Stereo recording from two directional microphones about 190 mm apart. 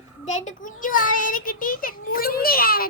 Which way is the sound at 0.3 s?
40° left (ahead or behind).